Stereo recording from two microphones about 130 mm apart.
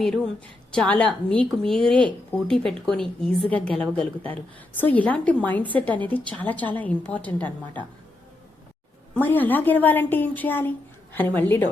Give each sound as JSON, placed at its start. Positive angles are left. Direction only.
{"t": 0.7, "sound": "a woman's voice", "side_deg": 10}
{"t": 9.1, "sound": "a woman's voice", "side_deg": 15}